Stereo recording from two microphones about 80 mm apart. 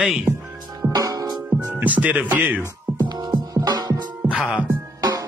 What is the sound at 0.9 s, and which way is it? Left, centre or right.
Music, right.